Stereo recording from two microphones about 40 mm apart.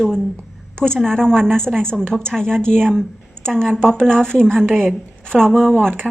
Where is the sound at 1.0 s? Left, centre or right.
Centre.